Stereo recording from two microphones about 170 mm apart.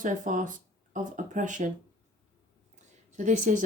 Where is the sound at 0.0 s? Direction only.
50° right (ahead or behind).